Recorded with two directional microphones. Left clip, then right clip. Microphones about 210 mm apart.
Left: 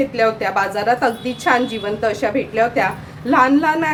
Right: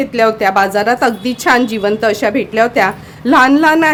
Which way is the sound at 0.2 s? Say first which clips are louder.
Right 8 dB; 55° right (ahead or behind).